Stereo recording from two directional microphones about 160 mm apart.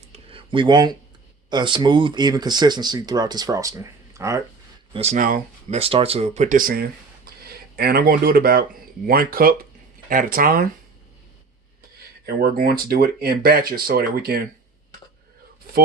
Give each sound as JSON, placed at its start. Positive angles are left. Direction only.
{"t": 0.1, "sound": "a sound", "side_deg": -35}
{"t": 1.5, "sound": "speech", "side_deg": -30}
{"t": 4.9, "sound": "speech", "side_deg": -40}
{"t": 12.2, "sound": "speech", "side_deg": -75}
{"t": 15.7, "sound": "speech", "side_deg": -75}